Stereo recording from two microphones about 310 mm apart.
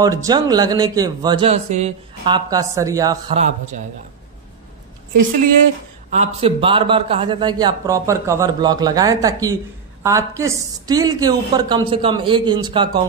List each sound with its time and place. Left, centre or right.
0.0 s speech: centre
6.1 s speech: centre